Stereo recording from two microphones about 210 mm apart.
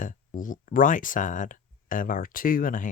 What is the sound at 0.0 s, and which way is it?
Speech, 40° left (ahead or behind).